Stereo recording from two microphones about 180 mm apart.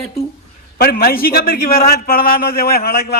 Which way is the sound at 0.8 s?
55° left (ahead or behind).